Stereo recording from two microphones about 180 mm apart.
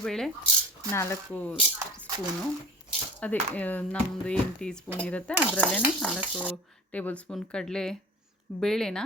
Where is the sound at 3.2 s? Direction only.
10° left (ahead or behind).